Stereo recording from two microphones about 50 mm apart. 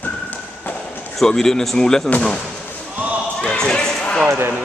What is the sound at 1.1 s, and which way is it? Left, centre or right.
Speech, centre.